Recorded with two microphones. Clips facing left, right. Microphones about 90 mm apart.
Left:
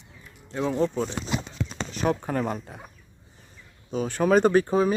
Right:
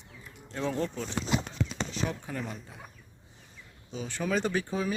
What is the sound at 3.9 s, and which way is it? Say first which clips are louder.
Speech: left 10 dB; 50° left (ahead or behind).